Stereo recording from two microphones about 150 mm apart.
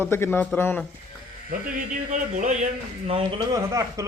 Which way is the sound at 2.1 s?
55° right (ahead or behind).